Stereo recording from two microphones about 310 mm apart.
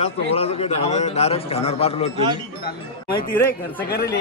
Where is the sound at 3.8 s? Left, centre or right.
Left.